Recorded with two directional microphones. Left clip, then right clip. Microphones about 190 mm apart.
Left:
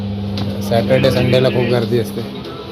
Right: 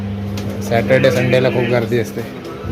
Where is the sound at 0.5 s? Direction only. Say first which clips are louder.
Right 1 dB; 10° right (ahead or behind).